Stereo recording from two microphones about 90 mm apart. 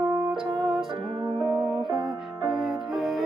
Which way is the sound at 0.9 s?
55° right (ahead or behind).